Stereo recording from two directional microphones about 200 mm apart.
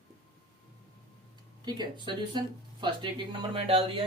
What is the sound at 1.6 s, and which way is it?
Speech, 20° right (ahead or behind).